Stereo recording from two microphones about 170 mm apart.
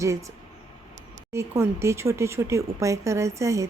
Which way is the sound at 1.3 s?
15° right (ahead or behind).